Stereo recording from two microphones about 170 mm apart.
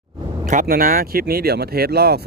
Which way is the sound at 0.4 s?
55° right (ahead or behind).